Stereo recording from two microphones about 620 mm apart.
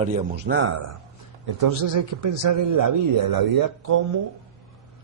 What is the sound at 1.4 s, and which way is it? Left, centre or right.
A man's voice, right.